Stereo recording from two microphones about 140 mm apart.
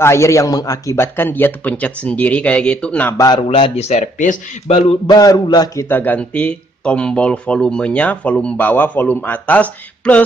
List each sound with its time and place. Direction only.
0.0 s speech: 20° left (ahead or behind)
3.2 s a man's voice: 30° left (ahead or behind)
3.4 s speech: 45° left (ahead or behind); by 4.4 s 60° left (ahead or behind)
5.0 s a man's voice: 25° left (ahead or behind)
5.9 s speech: 15° left (ahead or behind)